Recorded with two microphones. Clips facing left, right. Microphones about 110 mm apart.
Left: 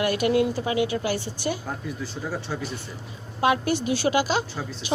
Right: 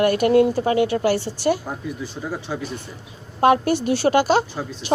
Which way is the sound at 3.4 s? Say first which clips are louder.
Right 6 dB; 45° right (ahead or behind).